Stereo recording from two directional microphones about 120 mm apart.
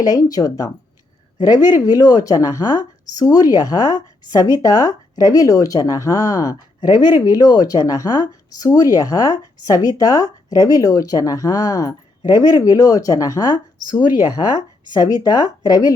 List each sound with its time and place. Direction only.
0.0 s speech: 30° left (ahead or behind)